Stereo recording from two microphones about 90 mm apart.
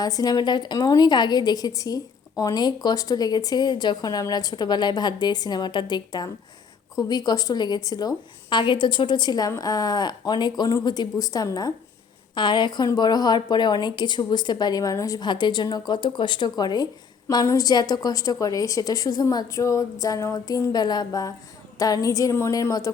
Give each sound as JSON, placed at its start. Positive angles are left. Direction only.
{"t": 0.0, "sound": "a woman's voice", "side_deg": 45}
{"t": 12.3, "sound": "a woman's voice", "side_deg": 60}
{"t": 15.3, "sound": "a woman's voice", "side_deg": 55}